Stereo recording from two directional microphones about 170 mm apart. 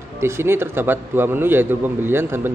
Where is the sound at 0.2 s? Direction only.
15° right (ahead or behind).